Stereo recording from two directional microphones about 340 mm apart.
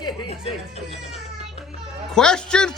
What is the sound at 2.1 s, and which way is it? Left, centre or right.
Speech, centre.